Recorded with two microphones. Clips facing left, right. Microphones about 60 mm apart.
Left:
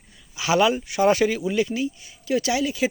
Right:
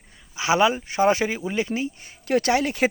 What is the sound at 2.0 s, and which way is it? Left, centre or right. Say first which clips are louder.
Speech: right 2 dB; right.